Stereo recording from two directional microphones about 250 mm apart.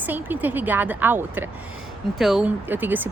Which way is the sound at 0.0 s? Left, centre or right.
Centre.